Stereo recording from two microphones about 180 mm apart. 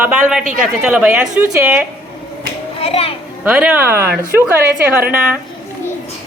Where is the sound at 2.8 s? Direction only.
35° left (ahead or behind).